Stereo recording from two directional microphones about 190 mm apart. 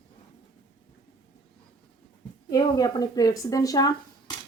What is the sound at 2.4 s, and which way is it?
Speech, 20° left (ahead or behind).